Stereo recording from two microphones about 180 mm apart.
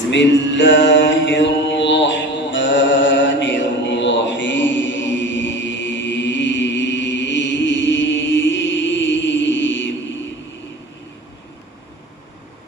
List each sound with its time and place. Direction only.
0.1 s mantra: 80° left